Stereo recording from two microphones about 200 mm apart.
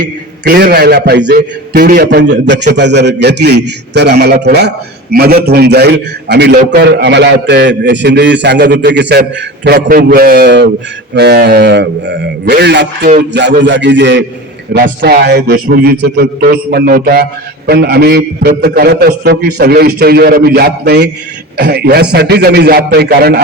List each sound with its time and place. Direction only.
0.4 s a man's voice: 55° right (ahead or behind)